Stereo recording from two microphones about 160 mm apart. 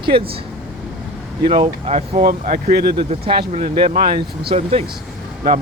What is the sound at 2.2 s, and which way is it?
Speech, 65° right (ahead or behind).